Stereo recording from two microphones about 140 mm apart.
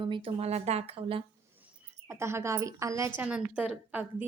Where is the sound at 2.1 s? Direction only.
20° right (ahead or behind).